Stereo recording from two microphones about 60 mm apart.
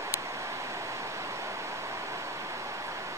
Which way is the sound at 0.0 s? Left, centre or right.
Right.